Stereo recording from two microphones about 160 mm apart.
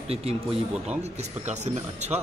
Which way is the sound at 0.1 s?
40° right (ahead or behind).